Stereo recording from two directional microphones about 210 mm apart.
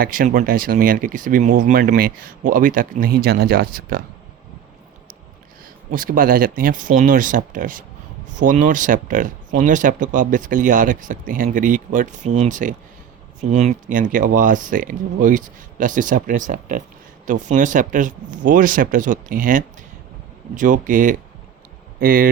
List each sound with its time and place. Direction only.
0.0 s speech: 40° right (ahead or behind)
5.9 s speech: 40° right (ahead or behind)